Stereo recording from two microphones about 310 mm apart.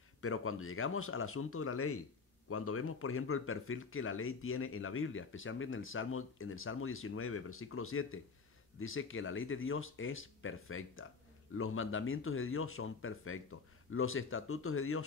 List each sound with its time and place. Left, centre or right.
0.2 s speech: left